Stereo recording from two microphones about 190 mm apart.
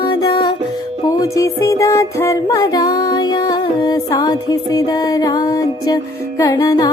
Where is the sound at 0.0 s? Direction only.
20° left (ahead or behind).